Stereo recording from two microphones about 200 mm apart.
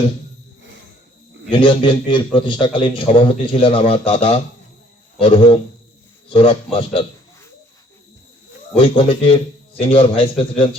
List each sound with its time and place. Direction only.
1.5 s a man's voice: 25° left (ahead or behind)
8.7 s a man's voice: 25° left (ahead or behind)